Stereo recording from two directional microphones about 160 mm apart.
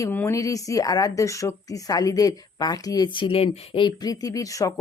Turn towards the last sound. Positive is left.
turn(degrees=20)  # may be behind; listen again after turning